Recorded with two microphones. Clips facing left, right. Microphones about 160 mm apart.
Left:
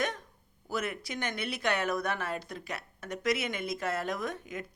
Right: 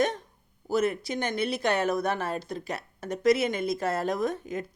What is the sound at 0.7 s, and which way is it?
Speech, 30° right (ahead or behind).